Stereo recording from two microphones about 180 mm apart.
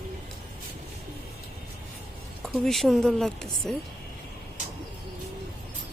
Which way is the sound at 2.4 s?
Centre (ahead or behind).